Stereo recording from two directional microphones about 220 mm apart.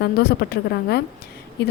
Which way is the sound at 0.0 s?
45° left (ahead or behind).